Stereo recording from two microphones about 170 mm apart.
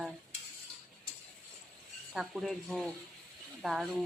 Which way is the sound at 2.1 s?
Centre (ahead or behind).